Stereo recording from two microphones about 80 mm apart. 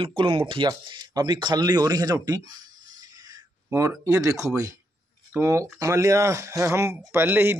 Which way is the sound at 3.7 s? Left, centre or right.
Right.